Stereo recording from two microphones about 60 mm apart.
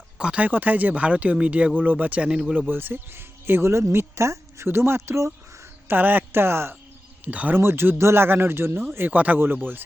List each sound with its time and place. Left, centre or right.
0.2 s a sound: centre
0.4 s speech: right
5.9 s speech: right
7.3 s speech: right
7.5 s speech: right
9.0 s speech: right